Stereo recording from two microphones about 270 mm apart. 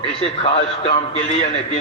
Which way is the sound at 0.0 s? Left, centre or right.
Left.